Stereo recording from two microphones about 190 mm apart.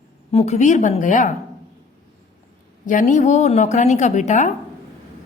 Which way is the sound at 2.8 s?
45° left (ahead or behind).